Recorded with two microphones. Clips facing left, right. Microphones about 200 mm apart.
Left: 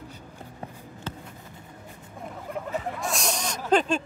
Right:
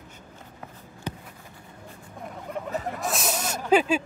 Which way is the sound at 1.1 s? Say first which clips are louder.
Right 3 dB; 15° right (ahead or behind).